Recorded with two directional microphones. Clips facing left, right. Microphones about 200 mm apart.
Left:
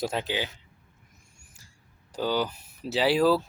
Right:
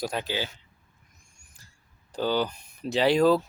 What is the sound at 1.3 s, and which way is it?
Owl, 10° left (ahead or behind).